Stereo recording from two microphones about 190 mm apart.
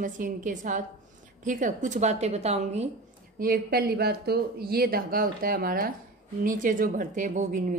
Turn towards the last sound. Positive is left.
turn(degrees=-40)  # may be behind; listen again after turning